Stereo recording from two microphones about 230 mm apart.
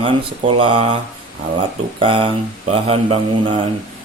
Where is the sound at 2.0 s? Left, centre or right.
Right.